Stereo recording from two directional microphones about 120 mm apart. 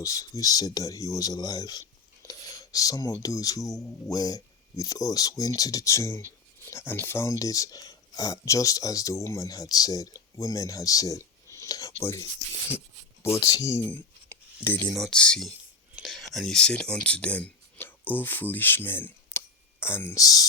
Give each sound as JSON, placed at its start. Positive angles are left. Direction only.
{"t": 0.0, "sound": "speech", "side_deg": 30}
{"t": 13.2, "sound": "speech", "side_deg": 25}
{"t": 14.8, "sound": "speech", "side_deg": 5}
{"t": 20.1, "sound": "speech", "side_deg": 30}